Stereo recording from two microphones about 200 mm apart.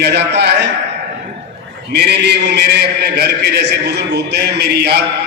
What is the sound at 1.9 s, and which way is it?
A man's voice, 55° right (ahead or behind).